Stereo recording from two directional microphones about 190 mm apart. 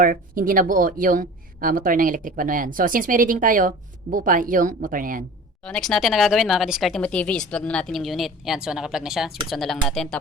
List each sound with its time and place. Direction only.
0.0 s speech: 45° right (ahead or behind)
5.6 s speech: 5° left (ahead or behind)